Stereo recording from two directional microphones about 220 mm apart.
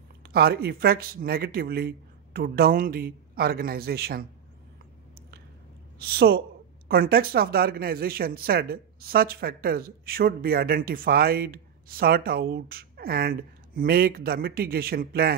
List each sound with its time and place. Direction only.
0.2 s speech: 45° right (ahead or behind)
5.9 s speech: 45° right (ahead or behind)